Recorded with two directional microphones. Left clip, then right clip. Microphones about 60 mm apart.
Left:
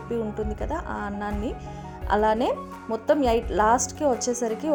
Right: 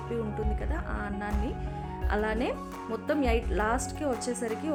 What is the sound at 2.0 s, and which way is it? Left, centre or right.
Speech, left.